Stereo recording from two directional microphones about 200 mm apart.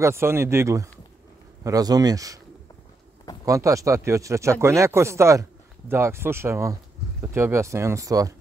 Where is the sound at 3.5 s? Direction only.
15° right (ahead or behind).